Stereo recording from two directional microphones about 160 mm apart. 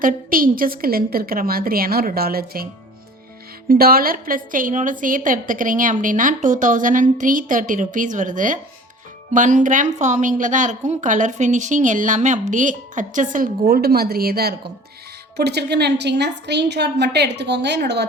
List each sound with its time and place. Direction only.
0.0 s a woman's voice: 60° right (ahead or behind)
3.7 s a woman's voice: 70° right (ahead or behind)
15.4 s a woman's voice: 90° right